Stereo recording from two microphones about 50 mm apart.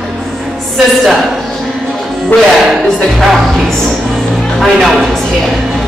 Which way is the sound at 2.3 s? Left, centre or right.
Left.